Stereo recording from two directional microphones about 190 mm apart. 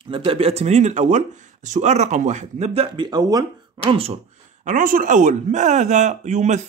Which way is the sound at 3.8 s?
30° right (ahead or behind).